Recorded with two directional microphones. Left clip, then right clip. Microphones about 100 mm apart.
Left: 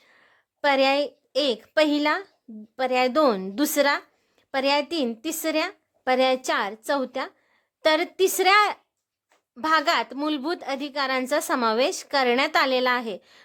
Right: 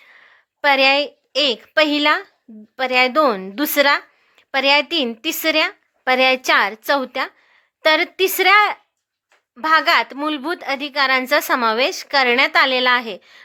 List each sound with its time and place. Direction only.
0.0 s a woman's voice: 25° left (ahead or behind)